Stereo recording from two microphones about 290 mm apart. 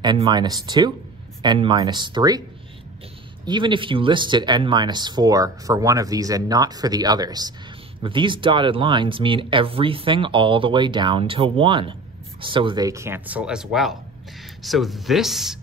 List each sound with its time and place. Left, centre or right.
0.0 s speech: centre
3.4 s speech: centre